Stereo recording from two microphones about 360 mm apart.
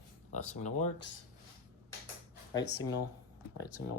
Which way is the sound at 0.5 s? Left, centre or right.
Centre.